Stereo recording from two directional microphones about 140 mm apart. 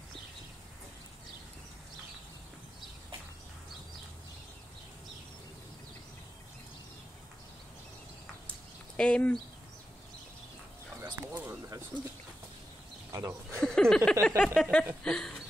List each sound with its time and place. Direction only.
8.9 s speech: 10° left (ahead or behind)
11.0 s bird: 15° right (ahead or behind)
13.1 s speech: 20° right (ahead or behind)
13.6 s speech: 5° left (ahead or behind)